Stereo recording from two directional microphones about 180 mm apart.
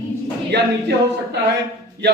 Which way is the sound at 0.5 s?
70° right (ahead or behind).